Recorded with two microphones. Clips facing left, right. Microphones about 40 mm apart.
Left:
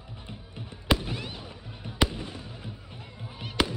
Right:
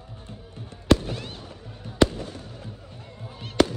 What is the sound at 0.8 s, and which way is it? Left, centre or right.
Fireworks, centre.